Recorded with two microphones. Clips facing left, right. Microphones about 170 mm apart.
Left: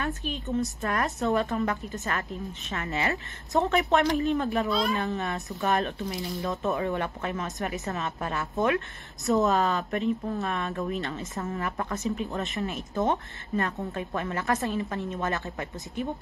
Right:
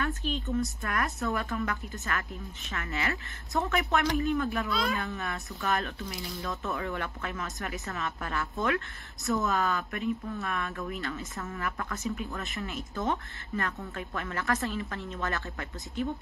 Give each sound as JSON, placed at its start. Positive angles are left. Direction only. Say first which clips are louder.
{"t": 0.0, "sound": "a woman's voice", "louder": "even", "side_deg": 20}